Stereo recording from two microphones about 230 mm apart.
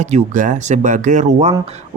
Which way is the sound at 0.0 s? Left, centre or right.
Right.